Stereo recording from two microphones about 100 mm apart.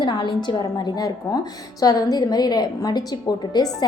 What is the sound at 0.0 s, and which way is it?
A woman's voice, 50° left (ahead or behind).